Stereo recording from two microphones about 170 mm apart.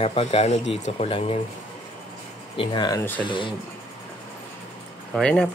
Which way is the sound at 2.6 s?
25° left (ahead or behind).